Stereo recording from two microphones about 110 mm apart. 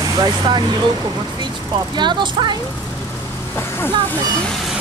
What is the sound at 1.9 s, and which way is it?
Speech, 45° right (ahead or behind).